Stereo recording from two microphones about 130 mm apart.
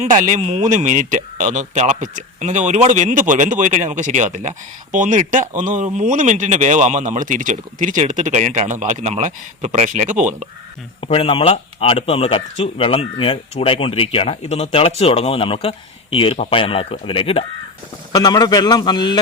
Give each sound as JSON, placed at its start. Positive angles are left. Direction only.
{"t": 0.0, "sound": "speech", "side_deg": -60}
{"t": 11.0, "sound": "speech", "side_deg": 45}
{"t": 18.1, "sound": "a man's voice", "side_deg": 30}